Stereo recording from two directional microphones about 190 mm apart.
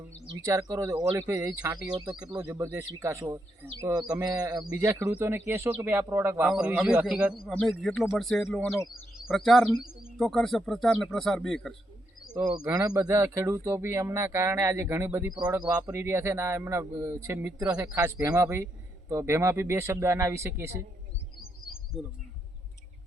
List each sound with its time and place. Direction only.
0.4 s speech: 15° right (ahead or behind); by 11.7 s centre (ahead or behind)
12.5 s speech: 20° right (ahead or behind)